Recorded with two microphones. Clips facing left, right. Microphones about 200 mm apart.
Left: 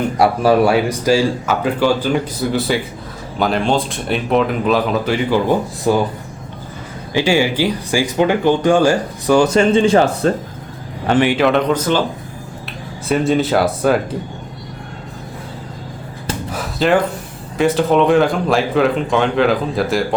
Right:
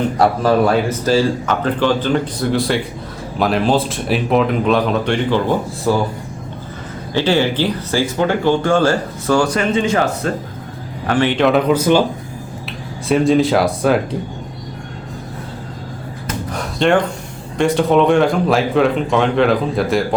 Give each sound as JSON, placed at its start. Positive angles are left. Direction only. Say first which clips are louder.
{"t": 0.2, "sound": "speech", "louder": "left 2 dB", "side_deg": 10}
{"t": 7.1, "sound": "a man's voice", "louder": "even", "side_deg": 10}
{"t": 11.3, "sound": "speech", "louder": "right 1 dB", "side_deg": 0}
{"t": 13.1, "sound": "speech", "louder": "right 2 dB", "side_deg": 0}
{"t": 16.5, "sound": "a sound", "louder": "even", "side_deg": 5}
{"t": 17.6, "sound": "speech", "louder": "even", "side_deg": 0}